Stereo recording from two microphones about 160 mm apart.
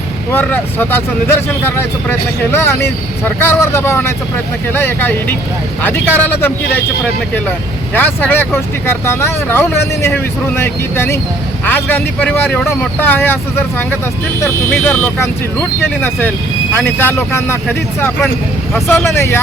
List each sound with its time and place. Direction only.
0.3 s speech: 10° left (ahead or behind)
18.9 s speech: 15° left (ahead or behind)